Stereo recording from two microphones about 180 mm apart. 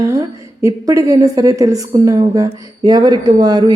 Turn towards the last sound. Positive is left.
turn(degrees=-20)  # may be behind; listen again after turning